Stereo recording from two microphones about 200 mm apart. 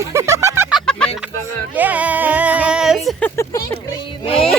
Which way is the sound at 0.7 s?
Centre (ahead or behind).